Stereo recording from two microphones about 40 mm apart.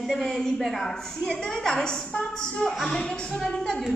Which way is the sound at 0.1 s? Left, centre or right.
Centre.